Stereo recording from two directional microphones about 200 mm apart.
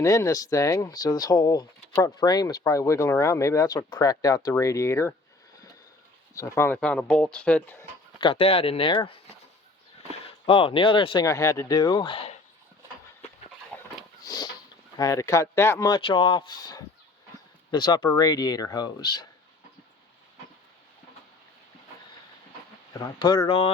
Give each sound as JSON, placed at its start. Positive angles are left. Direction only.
{"t": 0.0, "sound": "speech", "side_deg": 15}
{"t": 6.3, "sound": "speech", "side_deg": 15}
{"t": 8.2, "sound": "speech", "side_deg": 25}
{"t": 13.7, "sound": "a sound", "side_deg": 5}
{"t": 14.3, "sound": "a sound", "side_deg": 20}
{"t": 14.9, "sound": "speech", "side_deg": 15}
{"t": 22.9, "sound": "speech", "side_deg": 20}